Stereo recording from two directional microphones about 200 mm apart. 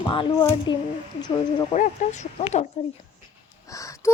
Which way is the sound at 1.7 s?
35° left (ahead or behind).